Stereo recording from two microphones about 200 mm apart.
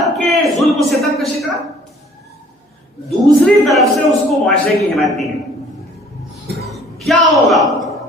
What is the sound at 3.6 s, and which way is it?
A man's voice, centre (ahead or behind).